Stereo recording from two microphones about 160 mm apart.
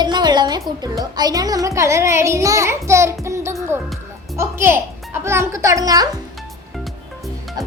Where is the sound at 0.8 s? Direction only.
25° right (ahead or behind).